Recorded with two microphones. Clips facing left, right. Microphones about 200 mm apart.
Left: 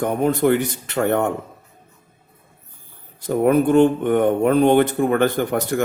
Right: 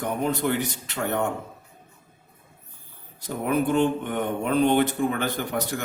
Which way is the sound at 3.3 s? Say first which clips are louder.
Left 8 dB; 50° left (ahead or behind).